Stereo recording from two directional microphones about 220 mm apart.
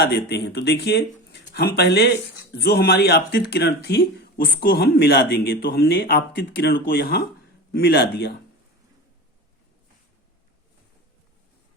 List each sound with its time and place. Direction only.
0.0 s speech: 50° left (ahead or behind)